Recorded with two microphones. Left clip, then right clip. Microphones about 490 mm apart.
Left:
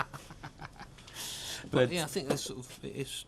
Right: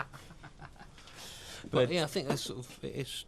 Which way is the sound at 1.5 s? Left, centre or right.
Centre.